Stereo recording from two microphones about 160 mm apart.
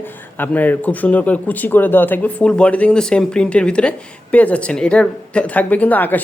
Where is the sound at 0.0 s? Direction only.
10° left (ahead or behind).